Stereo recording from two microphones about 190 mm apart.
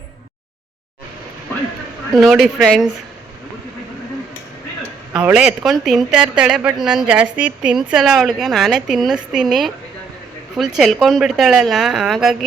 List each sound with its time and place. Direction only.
2.1 s speech: centre (ahead or behind)
5.1 s speech: 5° right (ahead or behind)
10.8 s speech: centre (ahead or behind)